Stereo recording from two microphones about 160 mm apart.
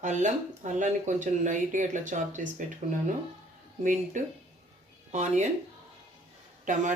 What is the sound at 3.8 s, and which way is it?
Speech, 50° right (ahead or behind).